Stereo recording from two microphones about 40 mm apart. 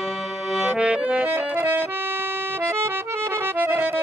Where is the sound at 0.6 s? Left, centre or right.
Right.